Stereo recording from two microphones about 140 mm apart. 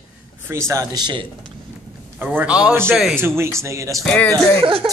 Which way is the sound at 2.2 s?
10° right (ahead or behind).